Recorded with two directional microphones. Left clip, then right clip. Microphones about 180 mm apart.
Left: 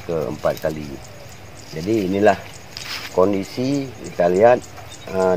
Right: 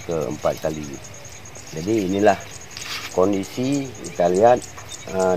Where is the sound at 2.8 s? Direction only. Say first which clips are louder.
Left 1 dB; 30° left (ahead or behind).